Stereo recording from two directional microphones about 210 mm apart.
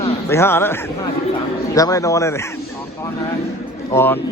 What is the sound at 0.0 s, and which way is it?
A man's voice, 10° left (ahead or behind).